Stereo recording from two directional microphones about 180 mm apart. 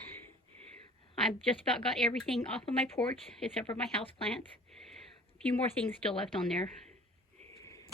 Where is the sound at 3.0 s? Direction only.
30° left (ahead or behind).